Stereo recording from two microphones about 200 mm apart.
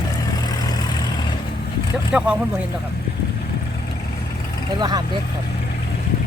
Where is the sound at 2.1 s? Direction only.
5° right (ahead or behind).